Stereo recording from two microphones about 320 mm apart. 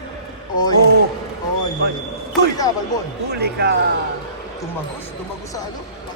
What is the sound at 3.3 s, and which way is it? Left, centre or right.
Speech, right.